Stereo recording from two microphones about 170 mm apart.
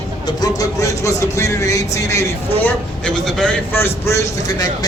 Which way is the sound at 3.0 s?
5° left (ahead or behind).